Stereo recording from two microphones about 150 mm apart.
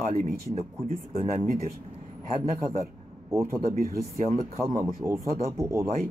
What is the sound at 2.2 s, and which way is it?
Speech, 65° right (ahead or behind).